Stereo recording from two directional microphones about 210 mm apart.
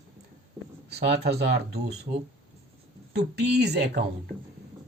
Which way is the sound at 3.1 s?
50° right (ahead or behind).